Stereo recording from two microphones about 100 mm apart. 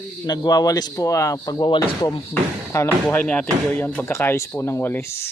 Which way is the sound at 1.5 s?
50° left (ahead or behind).